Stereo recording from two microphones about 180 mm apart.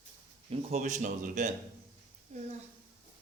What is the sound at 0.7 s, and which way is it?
Speech, 45° right (ahead or behind).